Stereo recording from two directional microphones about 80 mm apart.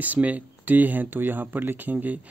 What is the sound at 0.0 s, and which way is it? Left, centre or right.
Speech, centre.